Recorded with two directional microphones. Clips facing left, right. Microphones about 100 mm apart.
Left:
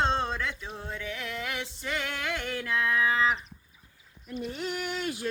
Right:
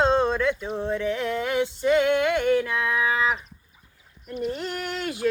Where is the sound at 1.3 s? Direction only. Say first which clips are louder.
Right 11 dB; 25° right (ahead or behind).